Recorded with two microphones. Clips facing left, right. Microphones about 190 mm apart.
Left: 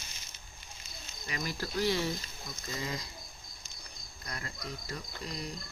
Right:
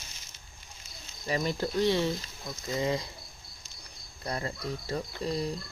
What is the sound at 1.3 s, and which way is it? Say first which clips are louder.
Speech: right 8 dB; 30° right (ahead or behind).